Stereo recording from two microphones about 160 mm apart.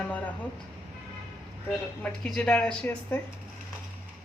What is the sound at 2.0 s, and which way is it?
A woman's voice, 5° left (ahead or behind).